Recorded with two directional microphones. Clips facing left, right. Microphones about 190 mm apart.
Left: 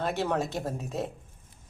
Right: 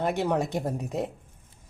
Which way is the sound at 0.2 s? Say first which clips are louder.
Right 3 dB; 15° right (ahead or behind).